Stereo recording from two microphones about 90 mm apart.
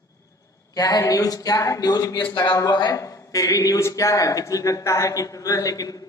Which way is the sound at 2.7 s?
50° left (ahead or behind).